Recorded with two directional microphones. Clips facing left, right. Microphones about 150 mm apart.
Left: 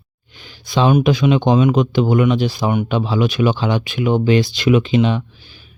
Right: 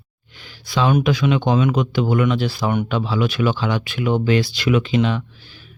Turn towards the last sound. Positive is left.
turn(degrees=15)  # may be behind; listen again after turning